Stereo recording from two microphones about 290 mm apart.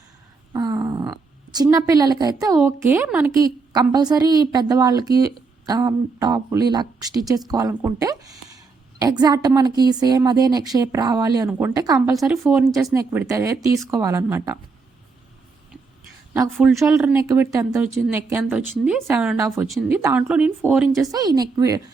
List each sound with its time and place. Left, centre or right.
0.5 s a sound: centre
1.7 s a woman's voice: centre
16.3 s a woman's voice: centre